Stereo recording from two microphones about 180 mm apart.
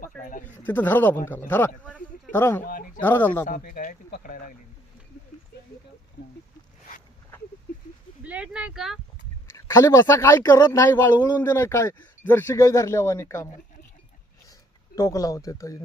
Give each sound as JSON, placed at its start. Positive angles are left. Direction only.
{"t": 0.0, "sound": "speech", "side_deg": 50}
{"t": 0.4, "sound": "speech", "side_deg": 10}
{"t": 2.6, "sound": "speech", "side_deg": 50}
{"t": 3.0, "sound": "speech", "side_deg": 10}
{"t": 3.4, "sound": "speech", "side_deg": 55}
{"t": 8.2, "sound": "speech", "side_deg": -5}
{"t": 9.6, "sound": "speech", "side_deg": 15}
{"t": 14.9, "sound": "speech", "side_deg": 20}